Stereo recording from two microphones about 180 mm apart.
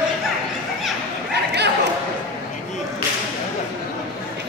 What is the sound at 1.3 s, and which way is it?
Chatter, 65° right (ahead or behind).